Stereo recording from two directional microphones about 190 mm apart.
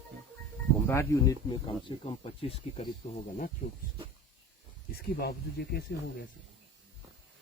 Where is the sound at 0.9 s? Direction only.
15° left (ahead or behind); by 2.8 s 30° left (ahead or behind).